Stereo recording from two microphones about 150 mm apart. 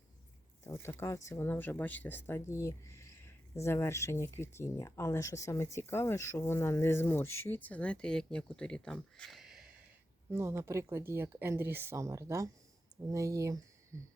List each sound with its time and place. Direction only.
0.6 s speech: 15° left (ahead or behind); by 9.9 s 5° right (ahead or behind)
10.3 s speech: 20° right (ahead or behind)